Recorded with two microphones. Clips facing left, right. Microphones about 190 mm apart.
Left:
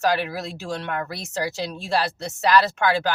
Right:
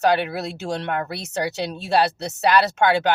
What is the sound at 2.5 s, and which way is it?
Speech, 25° right (ahead or behind).